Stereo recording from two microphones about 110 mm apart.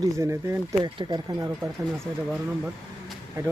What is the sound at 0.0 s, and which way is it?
Speech, 25° right (ahead or behind).